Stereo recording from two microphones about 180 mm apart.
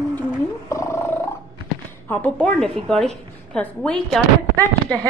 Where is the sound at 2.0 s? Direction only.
10° left (ahead or behind).